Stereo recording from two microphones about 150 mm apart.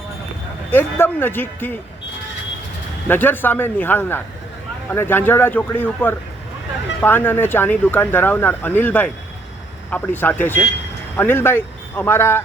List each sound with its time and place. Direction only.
0.7 s speech: 15° left (ahead or behind)
3.1 s speech: 15° left (ahead or behind)